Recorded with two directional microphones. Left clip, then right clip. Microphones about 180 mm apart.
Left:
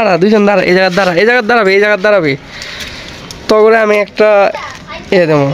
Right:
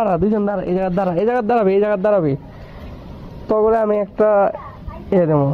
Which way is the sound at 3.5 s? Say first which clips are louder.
Left 8 dB; 30° left (ahead or behind).